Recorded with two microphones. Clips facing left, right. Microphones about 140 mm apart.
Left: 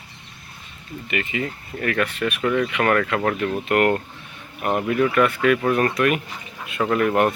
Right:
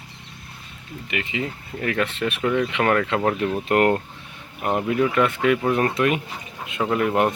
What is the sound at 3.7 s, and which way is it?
Speech, 30° right (ahead or behind).